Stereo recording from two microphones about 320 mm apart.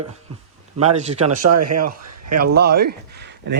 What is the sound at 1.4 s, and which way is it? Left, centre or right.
Speech, right.